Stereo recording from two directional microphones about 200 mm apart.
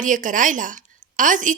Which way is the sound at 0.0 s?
40° right (ahead or behind).